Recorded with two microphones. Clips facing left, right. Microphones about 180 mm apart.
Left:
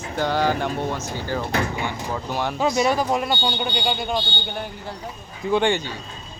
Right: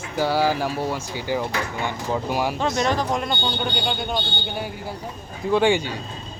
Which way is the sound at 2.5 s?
Centre (ahead or behind).